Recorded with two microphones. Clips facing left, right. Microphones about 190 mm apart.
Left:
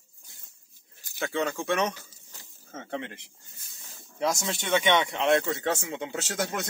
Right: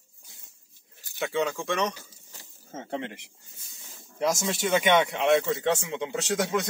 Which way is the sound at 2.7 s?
25° right (ahead or behind).